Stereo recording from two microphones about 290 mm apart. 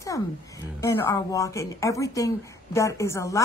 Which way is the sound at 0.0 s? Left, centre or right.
Centre.